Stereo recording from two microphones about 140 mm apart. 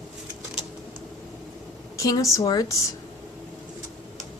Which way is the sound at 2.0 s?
25° left (ahead or behind).